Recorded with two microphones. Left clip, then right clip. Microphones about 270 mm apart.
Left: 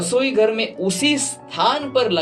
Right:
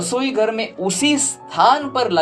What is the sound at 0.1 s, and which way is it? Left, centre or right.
Music, right.